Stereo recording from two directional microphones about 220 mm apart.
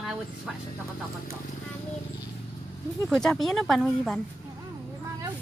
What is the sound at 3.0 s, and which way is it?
Speech, centre (ahead or behind).